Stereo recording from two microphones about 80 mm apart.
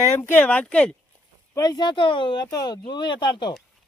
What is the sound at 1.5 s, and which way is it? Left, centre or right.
Speech, left.